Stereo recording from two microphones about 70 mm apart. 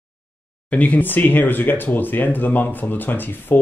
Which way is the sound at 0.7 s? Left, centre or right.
Left.